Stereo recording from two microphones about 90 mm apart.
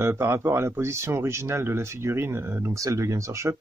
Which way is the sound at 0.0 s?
30° right (ahead or behind).